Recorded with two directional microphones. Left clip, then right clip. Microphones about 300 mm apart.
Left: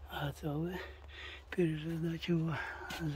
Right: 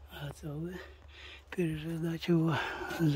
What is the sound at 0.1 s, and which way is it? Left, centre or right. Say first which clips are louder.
Speech: left 5 dB; centre.